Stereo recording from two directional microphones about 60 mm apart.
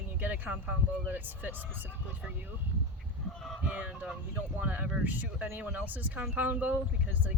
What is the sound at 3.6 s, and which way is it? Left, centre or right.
Speech, right.